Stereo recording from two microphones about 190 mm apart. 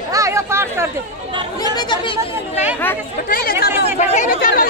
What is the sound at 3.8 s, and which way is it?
Speech, 35° left (ahead or behind).